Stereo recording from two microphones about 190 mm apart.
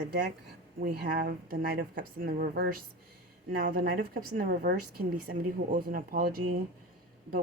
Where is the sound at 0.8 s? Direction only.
55° right (ahead or behind).